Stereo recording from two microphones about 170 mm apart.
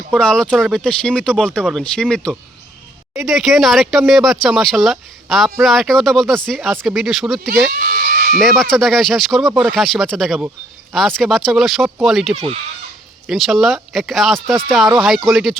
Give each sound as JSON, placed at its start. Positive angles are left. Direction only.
{"t": 0.1, "sound": "speech", "side_deg": 5}
{"t": 7.7, "sound": "goat", "side_deg": -60}
{"t": 8.4, "sound": "speech", "side_deg": 0}